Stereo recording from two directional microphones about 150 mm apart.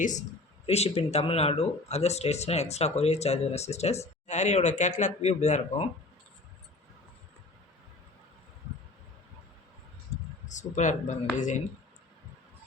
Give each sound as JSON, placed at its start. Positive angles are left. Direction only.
{"t": 0.0, "sound": "speech", "side_deg": 55}
{"t": 0.6, "sound": "speech", "side_deg": 40}
{"t": 10.4, "sound": "speech", "side_deg": 55}